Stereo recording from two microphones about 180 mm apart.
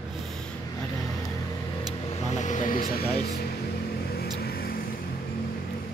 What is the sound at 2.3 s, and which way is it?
Speech, 40° left (ahead or behind).